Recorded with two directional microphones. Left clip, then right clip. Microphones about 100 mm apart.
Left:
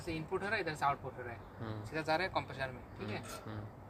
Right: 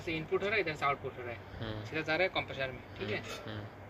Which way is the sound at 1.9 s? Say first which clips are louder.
Right 3 dB; 50° left (ahead or behind).